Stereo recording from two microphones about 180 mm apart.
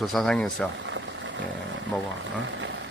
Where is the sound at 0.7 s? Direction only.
90° right.